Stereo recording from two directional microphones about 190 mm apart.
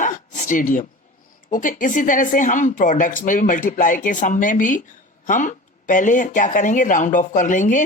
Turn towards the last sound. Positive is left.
turn(degrees=40)  # may be behind; listen again after turning